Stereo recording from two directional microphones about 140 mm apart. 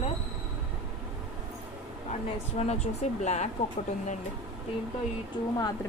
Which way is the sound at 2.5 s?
50° left (ahead or behind).